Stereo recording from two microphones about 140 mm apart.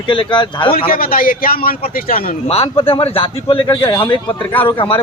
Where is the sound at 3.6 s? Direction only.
25° left (ahead or behind).